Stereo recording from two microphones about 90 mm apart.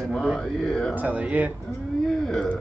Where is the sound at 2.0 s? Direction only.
5° left (ahead or behind).